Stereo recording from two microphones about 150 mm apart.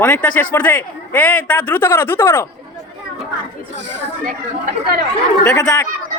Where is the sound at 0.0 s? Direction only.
10° left (ahead or behind).